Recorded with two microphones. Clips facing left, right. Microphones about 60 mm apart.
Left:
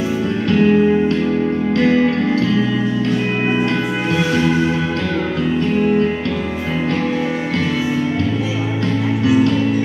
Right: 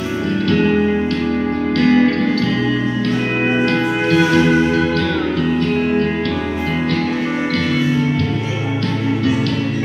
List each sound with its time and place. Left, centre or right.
1.8 s music: left